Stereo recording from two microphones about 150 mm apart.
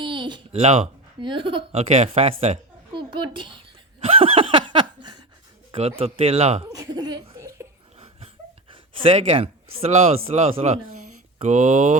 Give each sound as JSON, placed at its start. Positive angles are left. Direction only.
{"t": 0.0, "sound": "a sound", "side_deg": -30}
{"t": 0.6, "sound": "speech", "side_deg": -50}
{"t": 1.2, "sound": "speech", "side_deg": -35}
{"t": 1.9, "sound": "a child's voice", "side_deg": -45}
{"t": 4.0, "sound": "laughter", "side_deg": -40}
{"t": 6.0, "sound": "speech", "side_deg": -40}
{"t": 6.7, "sound": "laughter", "side_deg": -25}
{"t": 7.9, "sound": "wheeze", "side_deg": -40}
{"t": 8.7, "sound": "speech", "side_deg": -35}